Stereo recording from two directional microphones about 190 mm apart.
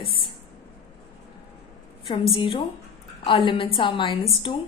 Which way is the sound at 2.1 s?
25° left (ahead or behind).